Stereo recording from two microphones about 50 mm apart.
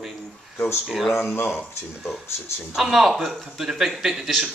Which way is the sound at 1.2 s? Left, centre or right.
Left.